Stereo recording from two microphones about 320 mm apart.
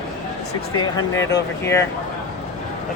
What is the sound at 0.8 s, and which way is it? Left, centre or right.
Speech, centre.